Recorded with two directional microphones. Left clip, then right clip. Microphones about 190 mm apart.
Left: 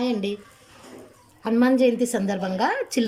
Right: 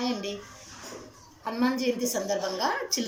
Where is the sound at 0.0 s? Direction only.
60° left (ahead or behind).